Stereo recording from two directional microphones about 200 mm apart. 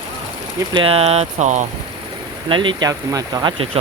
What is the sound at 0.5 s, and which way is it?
Speech, 25° right (ahead or behind).